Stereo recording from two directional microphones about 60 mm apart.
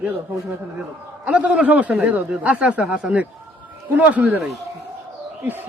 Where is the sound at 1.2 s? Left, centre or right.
Centre.